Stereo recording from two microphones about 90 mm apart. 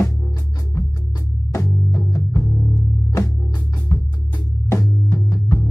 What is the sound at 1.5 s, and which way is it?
Music, 35° left (ahead or behind).